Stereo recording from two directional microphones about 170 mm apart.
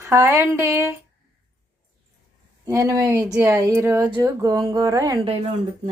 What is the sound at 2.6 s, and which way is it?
Speech, 20° right (ahead or behind).